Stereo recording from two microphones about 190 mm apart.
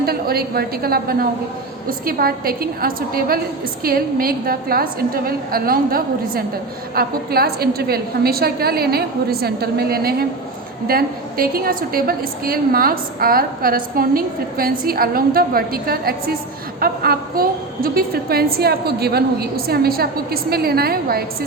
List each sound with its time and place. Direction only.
0.0 s a woman's voice: 55° right (ahead or behind)